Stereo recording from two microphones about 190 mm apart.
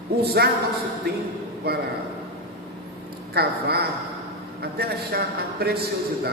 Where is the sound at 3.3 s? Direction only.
55° right (ahead or behind).